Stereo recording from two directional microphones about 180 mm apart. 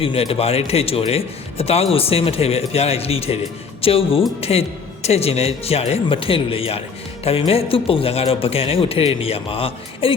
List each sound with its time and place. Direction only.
0.0 s speech: 30° left (ahead or behind)